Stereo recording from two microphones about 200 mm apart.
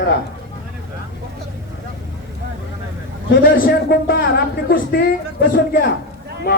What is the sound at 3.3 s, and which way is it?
A man's voice, 50° left (ahead or behind).